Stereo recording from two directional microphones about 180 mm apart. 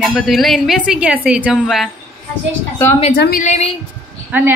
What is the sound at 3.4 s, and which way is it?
Speech, 40° left (ahead or behind).